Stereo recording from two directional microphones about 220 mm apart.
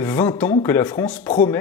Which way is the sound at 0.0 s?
10° left (ahead or behind).